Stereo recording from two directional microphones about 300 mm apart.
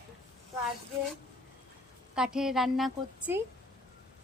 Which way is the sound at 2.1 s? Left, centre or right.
Centre.